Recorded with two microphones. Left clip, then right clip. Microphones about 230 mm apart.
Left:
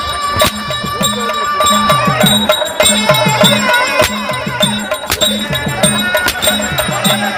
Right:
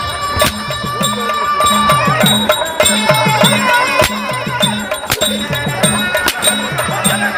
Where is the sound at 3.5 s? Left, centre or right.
Right.